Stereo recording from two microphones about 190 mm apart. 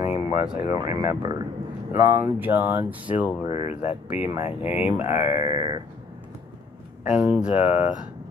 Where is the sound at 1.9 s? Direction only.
10° right (ahead or behind).